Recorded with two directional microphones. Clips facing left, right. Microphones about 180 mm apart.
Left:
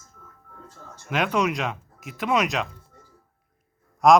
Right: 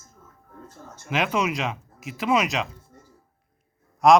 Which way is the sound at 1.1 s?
Centre (ahead or behind).